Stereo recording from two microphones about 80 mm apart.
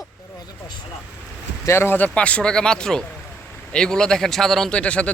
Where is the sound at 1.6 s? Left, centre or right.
Left.